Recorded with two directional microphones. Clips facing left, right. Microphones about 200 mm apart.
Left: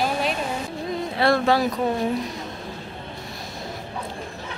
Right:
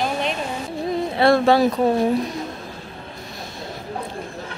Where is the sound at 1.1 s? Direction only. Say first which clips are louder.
Right 4 dB; 25° right (ahead or behind).